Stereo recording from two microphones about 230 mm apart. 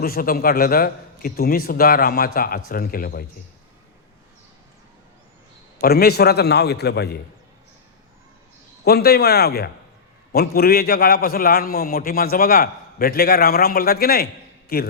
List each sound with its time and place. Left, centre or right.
0.0 s a man's voice: left
5.8 s a man's voice: left
8.8 s a man's voice: left